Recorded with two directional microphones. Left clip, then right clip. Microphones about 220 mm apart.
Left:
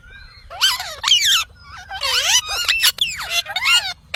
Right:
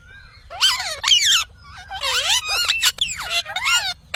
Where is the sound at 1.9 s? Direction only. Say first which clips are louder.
Left 2 dB; centre (ahead or behind).